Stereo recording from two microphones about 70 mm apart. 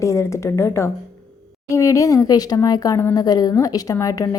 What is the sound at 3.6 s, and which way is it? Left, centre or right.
Speech, left.